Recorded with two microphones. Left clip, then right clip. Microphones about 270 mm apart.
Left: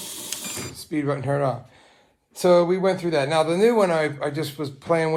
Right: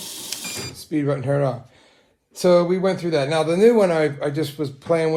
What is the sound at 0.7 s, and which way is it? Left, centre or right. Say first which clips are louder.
Speech: right 3 dB; left.